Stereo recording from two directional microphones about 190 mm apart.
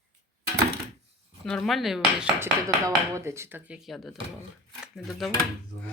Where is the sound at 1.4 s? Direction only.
5° left (ahead or behind).